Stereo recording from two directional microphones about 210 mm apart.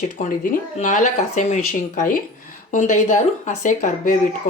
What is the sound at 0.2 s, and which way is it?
Speech, 40° left (ahead or behind).